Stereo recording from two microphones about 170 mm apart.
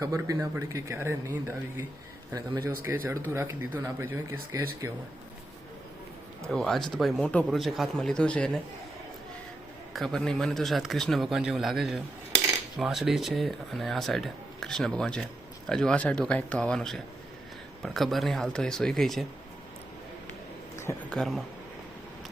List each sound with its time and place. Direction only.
0.0 s speech: 20° right (ahead or behind)
2.8 s speech: 15° right (ahead or behind)
6.5 s speech: centre (ahead or behind)
9.9 s speech: centre (ahead or behind)
21.1 s speech: centre (ahead or behind)